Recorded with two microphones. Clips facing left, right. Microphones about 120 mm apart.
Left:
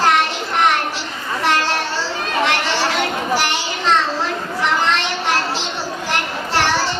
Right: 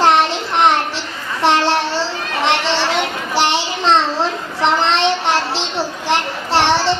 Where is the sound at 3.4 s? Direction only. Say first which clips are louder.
Right 4 dB; 30° right (ahead or behind).